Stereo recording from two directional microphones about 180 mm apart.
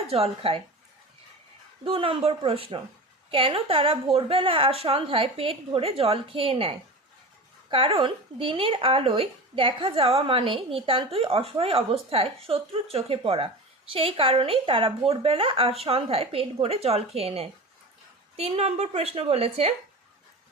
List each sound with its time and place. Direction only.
0.1 s speech: 30° right (ahead or behind)
1.8 s speech: 30° right (ahead or behind)